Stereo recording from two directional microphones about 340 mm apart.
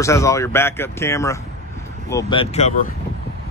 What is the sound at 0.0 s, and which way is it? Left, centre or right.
Speech, centre.